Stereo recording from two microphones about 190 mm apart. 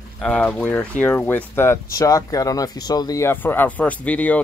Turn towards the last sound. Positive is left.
turn(degrees=5)  # may be behind; listen again after turning